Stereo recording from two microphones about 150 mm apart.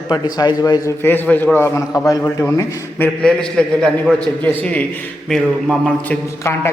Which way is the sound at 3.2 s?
5° left (ahead or behind).